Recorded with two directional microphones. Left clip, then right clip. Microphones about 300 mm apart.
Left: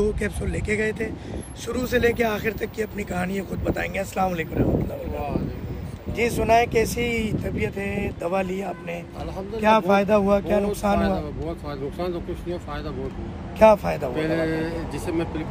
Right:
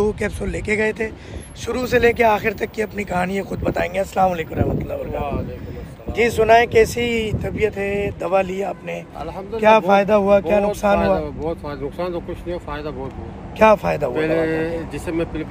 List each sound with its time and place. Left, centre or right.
0.0 s speech: centre
6.1 s speech: right
11.1 s speech: centre
13.6 s speech: right
14.1 s speech: centre